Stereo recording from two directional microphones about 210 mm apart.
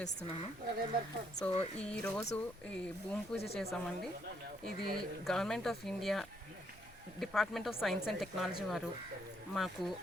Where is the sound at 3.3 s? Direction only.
5° left (ahead or behind).